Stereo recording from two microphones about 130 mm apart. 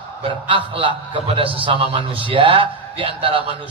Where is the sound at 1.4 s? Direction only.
45° right (ahead or behind).